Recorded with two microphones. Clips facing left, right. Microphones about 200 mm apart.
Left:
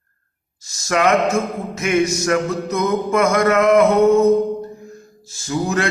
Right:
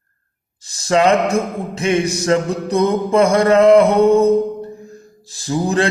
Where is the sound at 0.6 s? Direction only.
30° right (ahead or behind).